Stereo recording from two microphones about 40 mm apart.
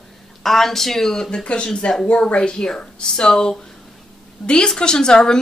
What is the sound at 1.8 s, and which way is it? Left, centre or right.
A woman's voice, left.